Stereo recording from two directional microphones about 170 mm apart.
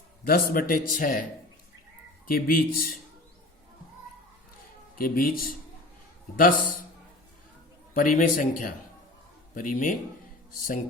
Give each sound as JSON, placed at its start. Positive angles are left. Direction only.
{"t": 0.3, "sound": "speech", "side_deg": 60}
{"t": 2.2, "sound": "speech", "side_deg": 55}
{"t": 4.9, "sound": "speech", "side_deg": 55}
{"t": 7.9, "sound": "speech", "side_deg": 50}